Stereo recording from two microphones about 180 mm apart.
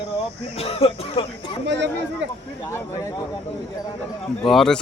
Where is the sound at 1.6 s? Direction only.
75° right (ahead or behind).